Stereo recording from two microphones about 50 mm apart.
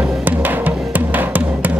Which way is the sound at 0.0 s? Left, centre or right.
Right.